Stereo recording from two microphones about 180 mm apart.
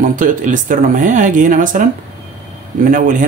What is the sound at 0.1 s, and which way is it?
Speech, 45° right (ahead or behind).